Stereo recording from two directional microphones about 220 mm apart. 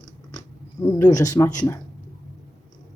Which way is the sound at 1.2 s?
15° left (ahead or behind).